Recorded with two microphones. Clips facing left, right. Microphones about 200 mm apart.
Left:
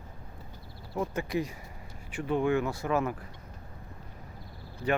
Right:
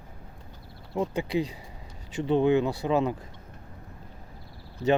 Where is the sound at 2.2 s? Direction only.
20° right (ahead or behind).